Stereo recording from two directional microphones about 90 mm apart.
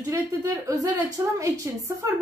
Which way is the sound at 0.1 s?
40° right (ahead or behind).